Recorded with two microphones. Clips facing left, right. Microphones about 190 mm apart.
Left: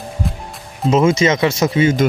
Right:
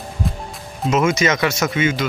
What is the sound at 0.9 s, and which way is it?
Speech, 30° left (ahead or behind).